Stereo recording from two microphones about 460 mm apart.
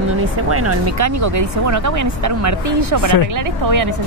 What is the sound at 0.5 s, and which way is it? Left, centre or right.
Speech, right.